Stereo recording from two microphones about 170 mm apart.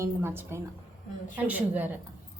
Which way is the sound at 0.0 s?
15° right (ahead or behind).